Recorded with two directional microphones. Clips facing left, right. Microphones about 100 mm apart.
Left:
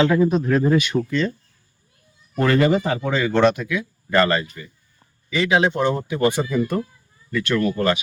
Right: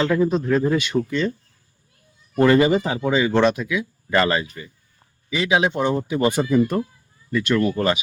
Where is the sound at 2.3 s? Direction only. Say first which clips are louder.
Right 4 dB; 20° right (ahead or behind).